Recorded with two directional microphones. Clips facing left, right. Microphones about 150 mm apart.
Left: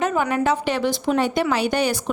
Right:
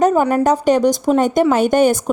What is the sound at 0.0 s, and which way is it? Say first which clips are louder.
A woman's voice: right 7 dB; 40° right (ahead or behind).